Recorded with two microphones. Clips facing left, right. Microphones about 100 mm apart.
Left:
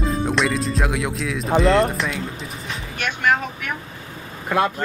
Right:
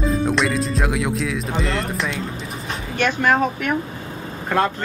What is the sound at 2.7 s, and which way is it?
Speech, 35° right (ahead or behind).